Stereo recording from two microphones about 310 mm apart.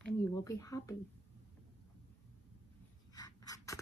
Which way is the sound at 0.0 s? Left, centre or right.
Centre.